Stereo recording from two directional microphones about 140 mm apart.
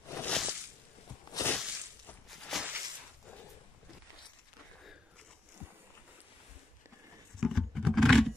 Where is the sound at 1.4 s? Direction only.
20° left (ahead or behind).